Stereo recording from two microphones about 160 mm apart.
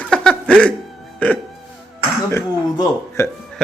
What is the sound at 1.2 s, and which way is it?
Speech, 10° left (ahead or behind).